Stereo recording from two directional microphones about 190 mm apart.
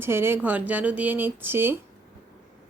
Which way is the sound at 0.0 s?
10° right (ahead or behind).